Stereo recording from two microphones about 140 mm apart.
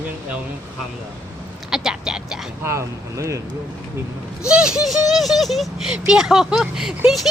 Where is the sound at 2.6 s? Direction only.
20° right (ahead or behind).